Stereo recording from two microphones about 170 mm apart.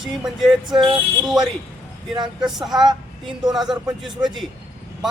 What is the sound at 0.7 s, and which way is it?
Speech, 25° right (ahead or behind).